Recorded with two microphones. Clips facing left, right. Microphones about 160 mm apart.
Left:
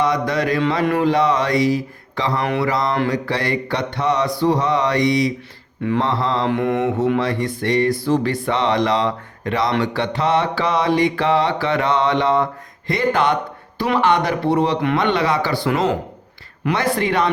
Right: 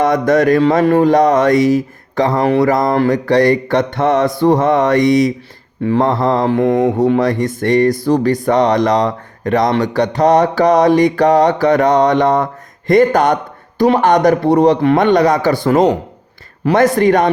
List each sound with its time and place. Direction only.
0.0 s mantra: 50° right (ahead or behind)